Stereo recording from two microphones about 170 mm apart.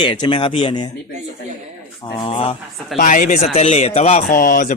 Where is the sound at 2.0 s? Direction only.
30° left (ahead or behind).